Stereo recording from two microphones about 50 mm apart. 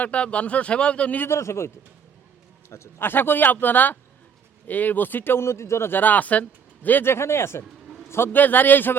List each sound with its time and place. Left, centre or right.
0.0 s speech: left
1.3 s speech: left
3.0 s speech: left
5.4 s speech: left
5.9 s speech: left
7.0 s speech: left
8.3 s speech: left